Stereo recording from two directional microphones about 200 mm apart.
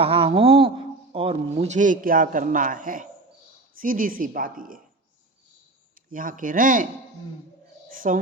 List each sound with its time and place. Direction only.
0.0 s speech: 30° right (ahead or behind); by 4.8 s 45° right (ahead or behind)
6.1 s speech: 45° right (ahead or behind)
7.9 s music: 40° right (ahead or behind)